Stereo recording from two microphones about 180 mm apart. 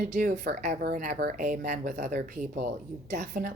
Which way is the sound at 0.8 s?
50° right (ahead or behind).